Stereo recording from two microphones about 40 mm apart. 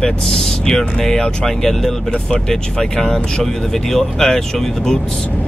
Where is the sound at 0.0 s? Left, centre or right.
Centre.